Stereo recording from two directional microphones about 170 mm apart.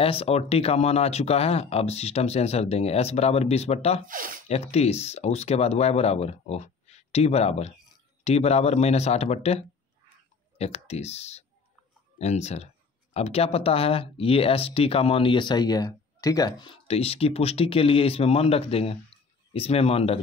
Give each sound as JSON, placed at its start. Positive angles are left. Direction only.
{"t": 0.0, "sound": "speech", "side_deg": 35}
{"t": 4.0, "sound": "speech", "side_deg": -55}
{"t": 4.5, "sound": "speech", "side_deg": 35}